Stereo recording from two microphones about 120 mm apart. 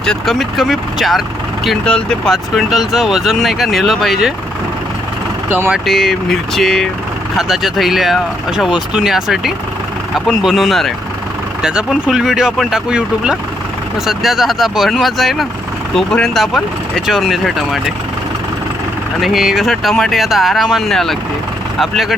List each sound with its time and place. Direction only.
0.0 s speech: 5° left (ahead or behind)
5.5 s speech: 15° right (ahead or behind)
5.8 s speech: centre (ahead or behind)
19.2 s speech: 5° right (ahead or behind)